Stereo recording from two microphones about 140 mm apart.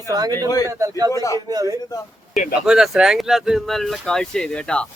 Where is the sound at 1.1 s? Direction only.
25° left (ahead or behind).